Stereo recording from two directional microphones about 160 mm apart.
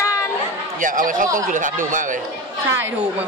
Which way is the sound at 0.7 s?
55° right (ahead or behind).